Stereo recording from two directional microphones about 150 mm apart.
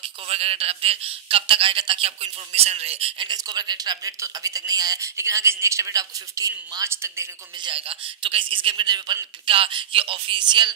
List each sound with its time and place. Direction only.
0.0 s speech: 40° right (ahead or behind); by 7.2 s 20° right (ahead or behind)
7.6 s speech: 35° right (ahead or behind)